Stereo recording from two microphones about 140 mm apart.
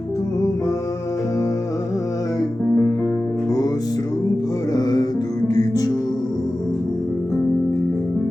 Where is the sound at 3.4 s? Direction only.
25° left (ahead or behind).